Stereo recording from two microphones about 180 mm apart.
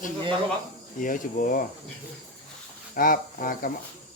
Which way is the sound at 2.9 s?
50° left (ahead or behind).